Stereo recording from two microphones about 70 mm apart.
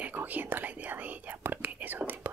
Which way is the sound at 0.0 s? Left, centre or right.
Right.